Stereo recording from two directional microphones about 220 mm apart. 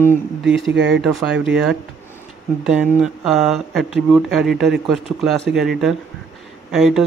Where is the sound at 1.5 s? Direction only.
5° right (ahead or behind).